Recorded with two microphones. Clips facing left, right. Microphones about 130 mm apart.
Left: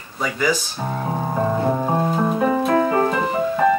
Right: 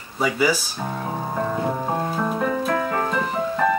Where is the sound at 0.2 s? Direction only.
10° right (ahead or behind).